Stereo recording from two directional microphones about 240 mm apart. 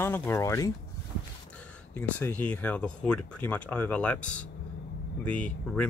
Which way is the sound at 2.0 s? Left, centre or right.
Centre.